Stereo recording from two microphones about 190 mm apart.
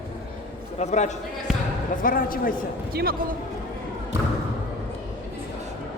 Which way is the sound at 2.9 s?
55° right (ahead or behind).